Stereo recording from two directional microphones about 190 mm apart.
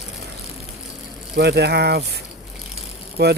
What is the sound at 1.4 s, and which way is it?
Speech, 60° right (ahead or behind).